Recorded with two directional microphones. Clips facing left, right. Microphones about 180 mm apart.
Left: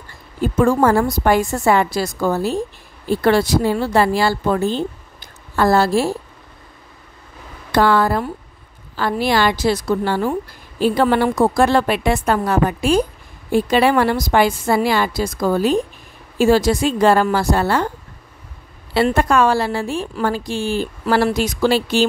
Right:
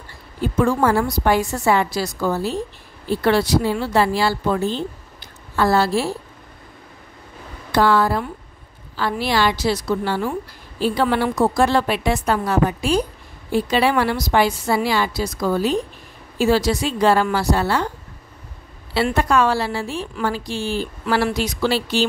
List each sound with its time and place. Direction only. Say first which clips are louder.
0.4 s a woman's voice: left 3 dB; 45° left (ahead or behind)
7.7 s a woman's voice: left 2 dB; 55° left (ahead or behind)
19.1 s a woman's voice: even; 50° left (ahead or behind)